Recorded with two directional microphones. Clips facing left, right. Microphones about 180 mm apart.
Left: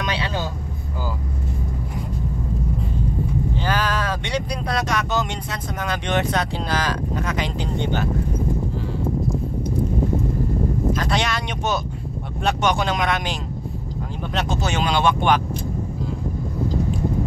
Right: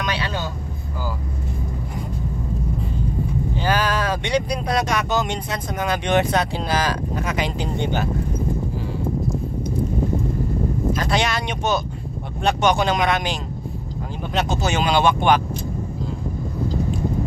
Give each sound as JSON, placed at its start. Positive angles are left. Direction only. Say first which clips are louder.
{"t": 0.0, "sound": "speech", "louder": "even", "side_deg": 25}
{"t": 3.5, "sound": "speech", "louder": "right 4 dB", "side_deg": -10}
{"t": 10.9, "sound": "speech", "louder": "right 3 dB", "side_deg": -5}